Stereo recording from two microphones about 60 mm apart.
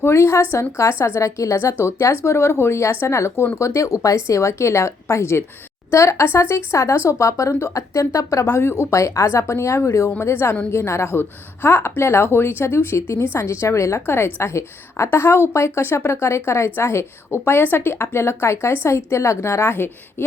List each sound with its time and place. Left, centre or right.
0.0 s a woman's voice: left
8.8 s a woman's voice: left